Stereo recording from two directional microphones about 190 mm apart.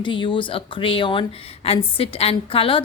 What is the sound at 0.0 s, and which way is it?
A woman's voice, 25° left (ahead or behind).